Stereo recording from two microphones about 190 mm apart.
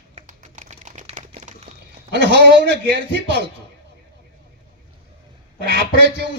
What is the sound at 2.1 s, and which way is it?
A man's voice, 65° right (ahead or behind).